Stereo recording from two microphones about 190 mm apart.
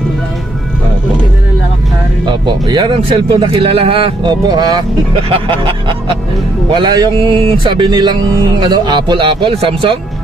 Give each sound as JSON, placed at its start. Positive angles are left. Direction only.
{"t": 2.2, "sound": "speech", "side_deg": -25}